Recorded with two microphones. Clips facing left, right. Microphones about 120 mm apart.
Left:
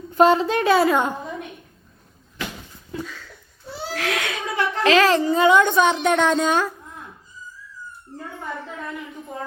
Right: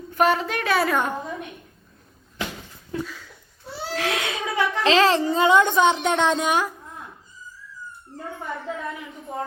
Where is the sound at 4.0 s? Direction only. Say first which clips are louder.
Even; 25° right (ahead or behind).